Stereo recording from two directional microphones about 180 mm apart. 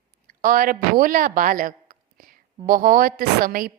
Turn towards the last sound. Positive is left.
turn(degrees=-50)  # may be behind; listen again after turning